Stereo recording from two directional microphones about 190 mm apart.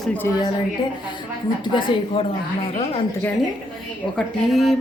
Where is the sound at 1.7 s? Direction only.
30° left (ahead or behind).